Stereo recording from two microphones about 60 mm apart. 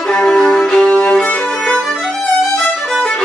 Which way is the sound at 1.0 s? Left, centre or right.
Left.